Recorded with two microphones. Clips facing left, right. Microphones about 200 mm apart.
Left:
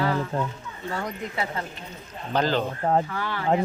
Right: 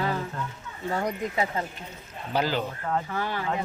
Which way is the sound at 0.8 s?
15° right (ahead or behind).